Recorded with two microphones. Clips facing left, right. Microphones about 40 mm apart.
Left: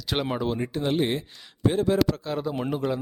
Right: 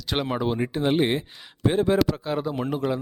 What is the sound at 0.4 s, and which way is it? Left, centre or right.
Speech, centre.